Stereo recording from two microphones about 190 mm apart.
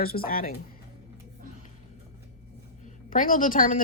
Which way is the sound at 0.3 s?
50° left (ahead or behind).